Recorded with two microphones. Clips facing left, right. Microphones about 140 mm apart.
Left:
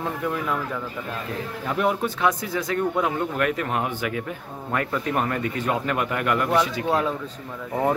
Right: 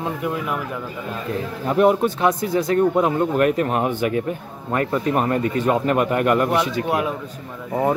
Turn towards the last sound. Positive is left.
turn(degrees=-15)  # may be behind; listen again after turning